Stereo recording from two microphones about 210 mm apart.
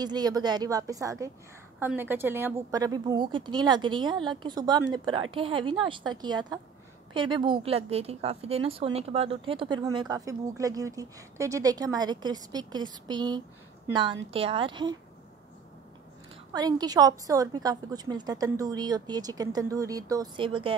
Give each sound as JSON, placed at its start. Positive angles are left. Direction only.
{"t": 0.0, "sound": "a woman's voice", "side_deg": -20}
{"t": 16.5, "sound": "a woman's voice", "side_deg": -20}